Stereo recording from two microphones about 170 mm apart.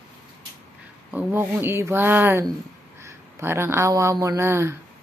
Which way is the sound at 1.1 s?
10° right (ahead or behind).